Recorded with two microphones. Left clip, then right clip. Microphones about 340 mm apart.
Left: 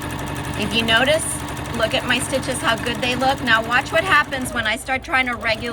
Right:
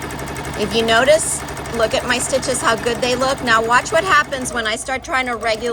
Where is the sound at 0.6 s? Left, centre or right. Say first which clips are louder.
Right 3 dB; centre.